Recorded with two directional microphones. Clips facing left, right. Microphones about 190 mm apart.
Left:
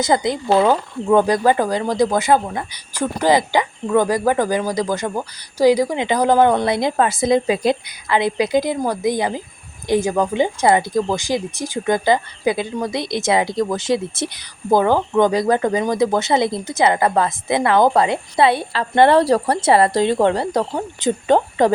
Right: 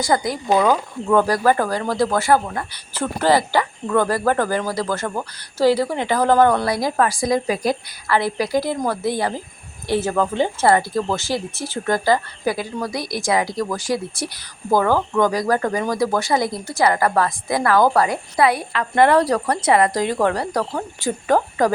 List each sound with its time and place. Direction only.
0.0 s speech: 20° left (ahead or behind)